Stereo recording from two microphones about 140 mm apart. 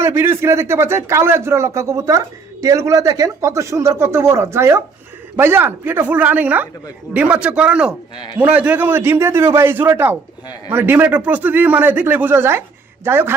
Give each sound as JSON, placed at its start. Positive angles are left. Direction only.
{"t": 0.0, "sound": "a man's voice", "side_deg": -20}
{"t": 8.1, "sound": "a man's voice", "side_deg": 35}
{"t": 8.4, "sound": "a man's voice", "side_deg": -10}